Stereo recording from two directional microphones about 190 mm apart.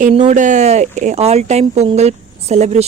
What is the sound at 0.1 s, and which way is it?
Speech, 30° right (ahead or behind).